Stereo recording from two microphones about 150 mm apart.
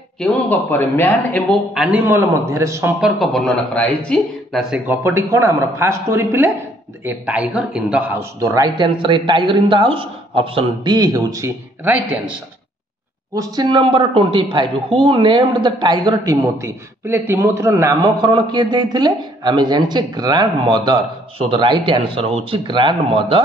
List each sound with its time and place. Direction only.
0.2 s a man's voice: 10° left (ahead or behind)
1.7 s speech: 5° right (ahead or behind)
3.0 s speech: centre (ahead or behind)
4.7 s speech: 15° right (ahead or behind)
8.2 s a man's voice: 20° right (ahead or behind)
13.3 s a woman's voice: 25° right (ahead or behind)
18.2 s a man's voice: 30° right (ahead or behind)